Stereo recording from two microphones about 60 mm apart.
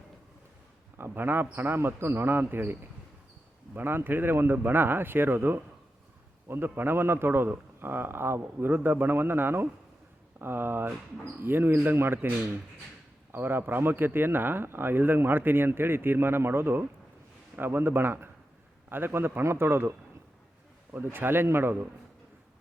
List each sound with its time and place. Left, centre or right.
0.9 s speech: right
3.8 s speech: right
13.3 s speech: right
20.9 s speech: right